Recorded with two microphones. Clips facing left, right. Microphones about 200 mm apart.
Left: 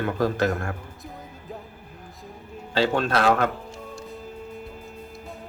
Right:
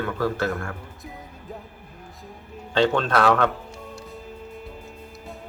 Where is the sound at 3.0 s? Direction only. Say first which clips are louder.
Right 1 dB; 30° left (ahead or behind).